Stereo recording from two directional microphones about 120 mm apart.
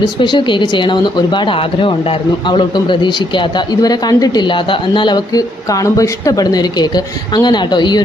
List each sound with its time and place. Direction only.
0.0 s speech: 40° left (ahead or behind)